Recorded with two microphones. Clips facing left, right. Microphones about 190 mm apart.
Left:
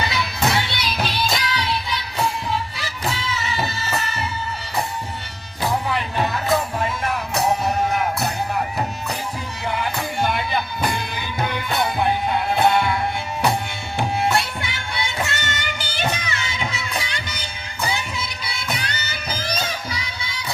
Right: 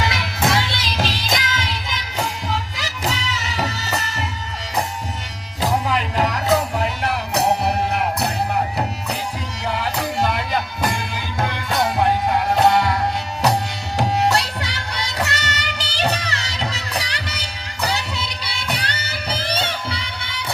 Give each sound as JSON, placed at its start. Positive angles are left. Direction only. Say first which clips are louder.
{"t": 0.0, "sound": "music", "louder": "right 1 dB", "side_deg": -90}
{"t": 5.9, "sound": "music", "louder": "right 2 dB", "side_deg": -85}
{"t": 14.0, "sound": "music", "louder": "right 2 dB", "side_deg": -75}
{"t": 19.3, "sound": "music", "louder": "right 2 dB", "side_deg": -30}
{"t": 20.0, "sound": "music", "louder": "right 1 dB", "side_deg": -60}